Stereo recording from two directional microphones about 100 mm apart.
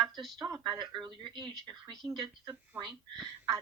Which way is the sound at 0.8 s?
50° right (ahead or behind).